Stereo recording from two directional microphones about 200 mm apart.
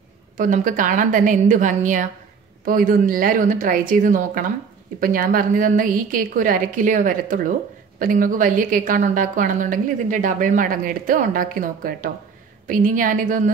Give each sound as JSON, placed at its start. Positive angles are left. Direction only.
{"t": 0.4, "sound": "a woman's voice", "side_deg": -40}